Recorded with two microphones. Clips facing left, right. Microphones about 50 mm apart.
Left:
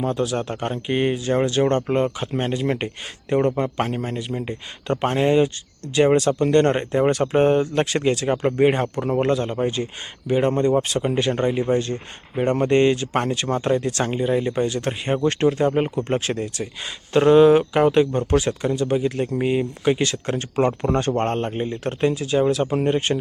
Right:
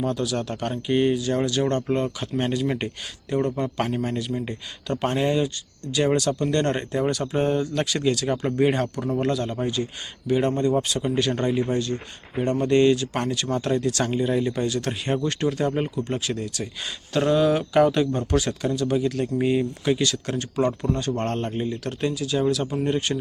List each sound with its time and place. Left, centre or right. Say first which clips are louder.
0.0 s speech: left 3 dB; left
3.2 s speech: left 4 dB; left
10.5 s speech: left 3 dB; left
12.4 s speech: left 2 dB; left
14.5 s speech: left 3 dB; left
16.0 s speech: left 4 dB; left